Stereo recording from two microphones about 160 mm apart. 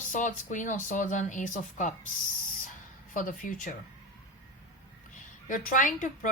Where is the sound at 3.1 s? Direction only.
60° left (ahead or behind).